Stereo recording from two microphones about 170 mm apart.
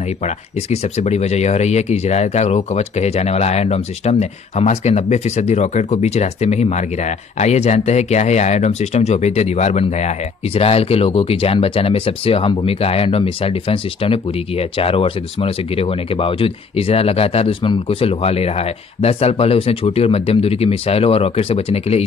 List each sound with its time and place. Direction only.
0.7 s speech: 40° left (ahead or behind)